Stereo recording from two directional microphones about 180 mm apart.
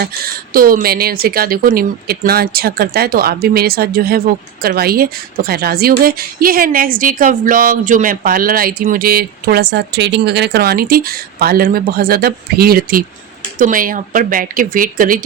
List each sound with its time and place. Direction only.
0.5 s speech: 55° right (ahead or behind)